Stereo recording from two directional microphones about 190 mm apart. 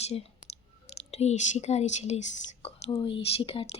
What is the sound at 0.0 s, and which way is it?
Clicking, 35° left (ahead or behind).